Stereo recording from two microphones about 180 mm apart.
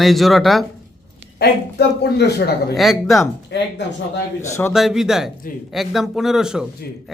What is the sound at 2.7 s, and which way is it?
Speech, centre (ahead or behind).